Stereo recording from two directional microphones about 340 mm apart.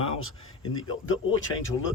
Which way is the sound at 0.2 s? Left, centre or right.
Left.